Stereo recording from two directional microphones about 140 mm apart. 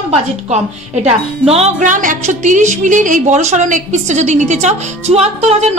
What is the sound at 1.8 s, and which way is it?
A woman's voice, 65° right (ahead or behind).